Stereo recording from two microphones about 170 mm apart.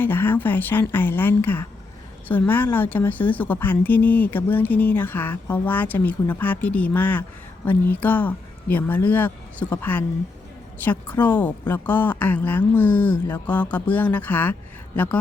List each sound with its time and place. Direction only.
0.0 s speech: 10° left (ahead or behind)